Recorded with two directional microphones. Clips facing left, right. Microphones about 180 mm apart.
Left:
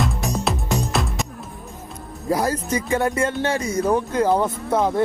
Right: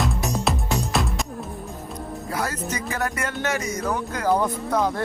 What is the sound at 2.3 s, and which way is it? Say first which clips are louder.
Speech: left 7 dB; 30° left (ahead or behind).